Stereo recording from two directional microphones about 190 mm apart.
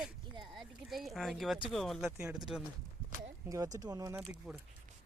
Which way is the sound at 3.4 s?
15° right (ahead or behind).